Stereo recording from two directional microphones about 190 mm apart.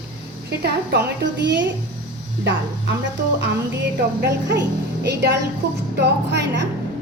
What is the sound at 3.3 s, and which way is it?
A woman's voice, 65° right (ahead or behind).